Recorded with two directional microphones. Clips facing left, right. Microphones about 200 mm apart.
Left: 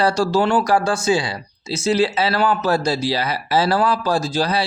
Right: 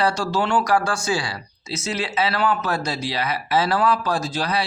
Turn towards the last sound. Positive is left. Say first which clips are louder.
# left 4 dB
turn(degrees=30)  # may be behind; listen again after turning